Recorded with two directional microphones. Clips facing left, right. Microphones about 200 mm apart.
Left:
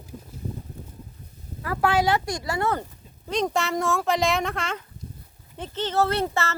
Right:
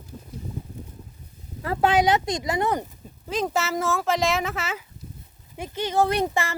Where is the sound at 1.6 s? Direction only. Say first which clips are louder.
Right 2 dB; 25° right (ahead or behind).